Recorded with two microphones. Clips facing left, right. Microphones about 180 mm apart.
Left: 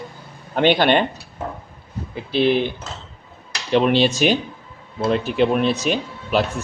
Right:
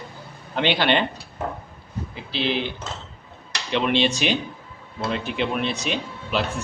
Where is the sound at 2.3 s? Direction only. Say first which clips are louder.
Left 8 dB; 50° left (ahead or behind).